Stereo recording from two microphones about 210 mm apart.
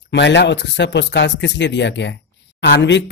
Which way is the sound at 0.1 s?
55° left (ahead or behind).